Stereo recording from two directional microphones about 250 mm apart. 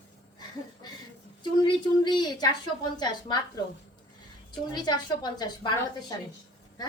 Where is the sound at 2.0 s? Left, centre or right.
Centre.